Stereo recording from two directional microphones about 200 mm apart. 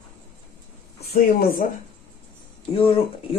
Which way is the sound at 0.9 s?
50° left (ahead or behind).